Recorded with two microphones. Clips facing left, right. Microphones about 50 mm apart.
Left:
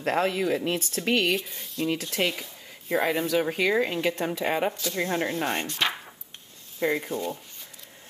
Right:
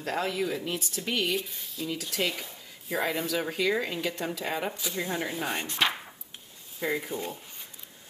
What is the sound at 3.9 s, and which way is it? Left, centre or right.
Speech, left.